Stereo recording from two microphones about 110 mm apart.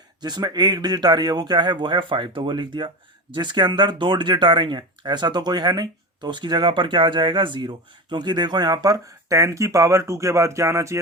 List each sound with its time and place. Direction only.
0.2 s speech: 40° right (ahead or behind)